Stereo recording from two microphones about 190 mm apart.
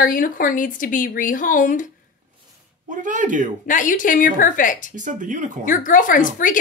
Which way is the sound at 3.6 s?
45° left (ahead or behind).